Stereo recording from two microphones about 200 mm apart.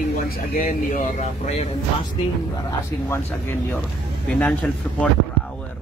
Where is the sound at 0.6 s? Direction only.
40° left (ahead or behind).